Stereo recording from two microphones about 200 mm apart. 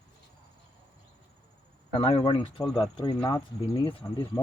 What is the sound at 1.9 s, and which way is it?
Speech, 30° left (ahead or behind).